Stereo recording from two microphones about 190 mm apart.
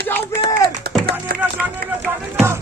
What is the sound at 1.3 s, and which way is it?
Run, 55° right (ahead or behind).